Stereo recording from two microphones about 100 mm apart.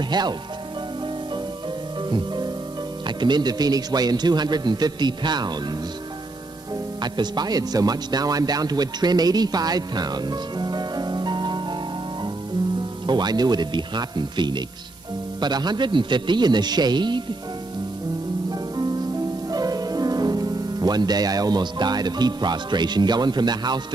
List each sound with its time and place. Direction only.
0.1 s a man's voice: 45° right (ahead or behind)
2.0 s music: 50° right (ahead or behind)
3.2 s a man's voice: 45° right (ahead or behind)
7.0 s speech: 45° right (ahead or behind)
13.0 s a man's voice: 45° right (ahead or behind)
18.5 s music: 40° right (ahead or behind)